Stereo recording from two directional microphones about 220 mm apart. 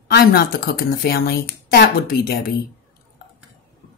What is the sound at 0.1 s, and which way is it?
Speech, 45° left (ahead or behind).